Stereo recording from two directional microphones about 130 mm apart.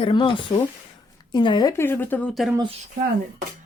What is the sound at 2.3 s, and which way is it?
Speech, centre (ahead or behind).